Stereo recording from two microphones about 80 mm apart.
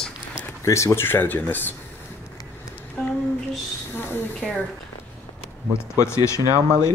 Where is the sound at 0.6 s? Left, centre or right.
Left.